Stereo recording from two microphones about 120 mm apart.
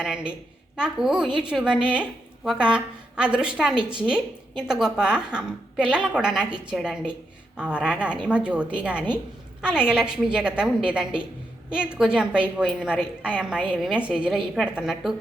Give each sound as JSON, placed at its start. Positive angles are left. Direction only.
{"t": 0.0, "sound": "a woman's voice", "side_deg": -5}